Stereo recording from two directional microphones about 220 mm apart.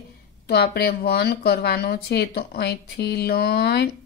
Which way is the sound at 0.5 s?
45° left (ahead or behind).